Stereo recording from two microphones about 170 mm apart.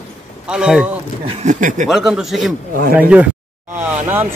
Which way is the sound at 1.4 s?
50° right (ahead or behind).